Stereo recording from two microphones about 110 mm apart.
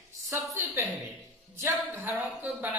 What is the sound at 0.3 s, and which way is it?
A woman's voice, 20° right (ahead or behind).